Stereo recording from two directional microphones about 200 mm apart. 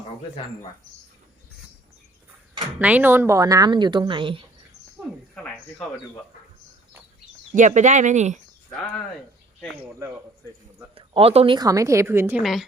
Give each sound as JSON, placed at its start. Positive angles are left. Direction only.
{"t": 2.7, "sound": "a woman's voice", "side_deg": -10}
{"t": 5.3, "sound": "speech", "side_deg": 5}
{"t": 7.5, "sound": "speech", "side_deg": -40}
{"t": 10.9, "sound": "a woman's voice", "side_deg": -30}
{"t": 12.4, "sound": "a woman's voice", "side_deg": 0}